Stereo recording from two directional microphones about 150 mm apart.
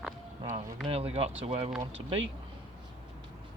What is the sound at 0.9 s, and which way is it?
Speech, 40° right (ahead or behind).